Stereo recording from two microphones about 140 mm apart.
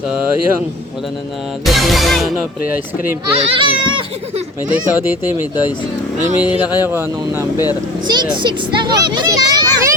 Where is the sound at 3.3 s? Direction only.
40° right (ahead or behind).